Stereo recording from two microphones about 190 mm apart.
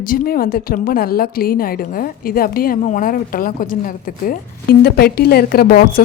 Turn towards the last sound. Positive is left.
turn(degrees=55)  # may be behind; listen again after turning